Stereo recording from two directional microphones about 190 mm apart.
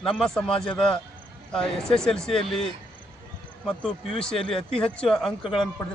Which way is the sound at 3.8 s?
Centre (ahead or behind).